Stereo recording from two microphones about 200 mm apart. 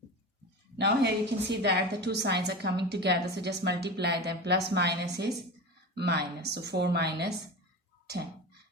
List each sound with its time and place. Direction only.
0.8 s a woman's voice: 55° right (ahead or behind)